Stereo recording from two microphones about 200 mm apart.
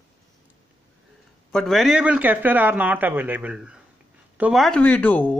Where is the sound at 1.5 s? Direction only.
Centre (ahead or behind).